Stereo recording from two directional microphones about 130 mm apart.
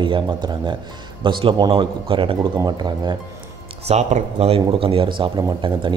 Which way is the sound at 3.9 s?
60° right (ahead or behind).